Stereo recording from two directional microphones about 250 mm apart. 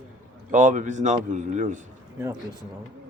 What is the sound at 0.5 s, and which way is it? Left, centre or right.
A man's voice, right.